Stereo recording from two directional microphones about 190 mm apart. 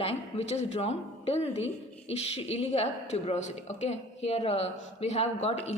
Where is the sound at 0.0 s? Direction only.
35° left (ahead or behind).